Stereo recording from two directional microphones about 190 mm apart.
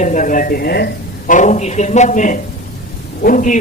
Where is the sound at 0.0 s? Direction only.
40° left (ahead or behind).